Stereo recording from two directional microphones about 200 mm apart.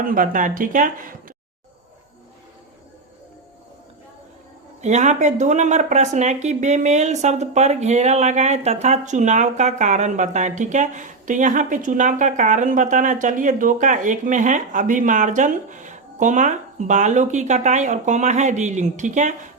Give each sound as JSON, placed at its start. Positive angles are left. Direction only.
{"t": 0.1, "sound": "speech", "side_deg": -40}
{"t": 4.8, "sound": "speech", "side_deg": -35}